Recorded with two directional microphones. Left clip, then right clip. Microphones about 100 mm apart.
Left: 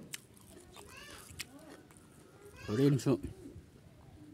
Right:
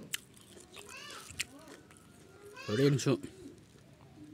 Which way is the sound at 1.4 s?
30° left (ahead or behind).